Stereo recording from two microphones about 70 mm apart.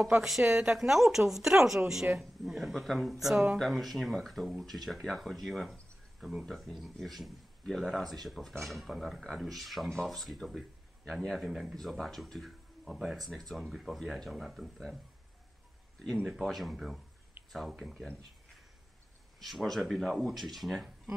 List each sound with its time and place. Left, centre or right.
0.2 s a woman's voice: centre
16.4 s speech: centre
19.4 s speech: centre